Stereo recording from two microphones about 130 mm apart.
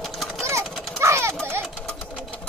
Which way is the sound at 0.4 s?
20° right (ahead or behind).